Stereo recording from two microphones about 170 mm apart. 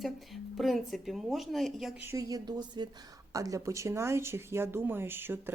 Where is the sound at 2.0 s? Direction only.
20° right (ahead or behind).